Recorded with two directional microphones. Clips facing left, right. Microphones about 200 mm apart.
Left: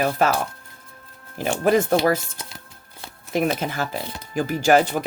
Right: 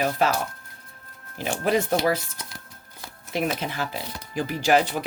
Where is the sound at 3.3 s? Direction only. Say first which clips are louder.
Left 4 dB; 45° left (ahead or behind).